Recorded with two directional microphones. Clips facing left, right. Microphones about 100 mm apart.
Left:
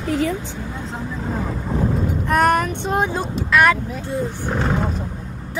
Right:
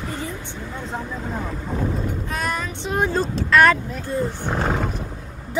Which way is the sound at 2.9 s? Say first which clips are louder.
Right 1 dB; 15° left (ahead or behind).